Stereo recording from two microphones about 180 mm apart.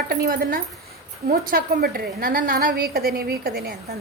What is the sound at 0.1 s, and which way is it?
A woman's voice, 50° right (ahead or behind).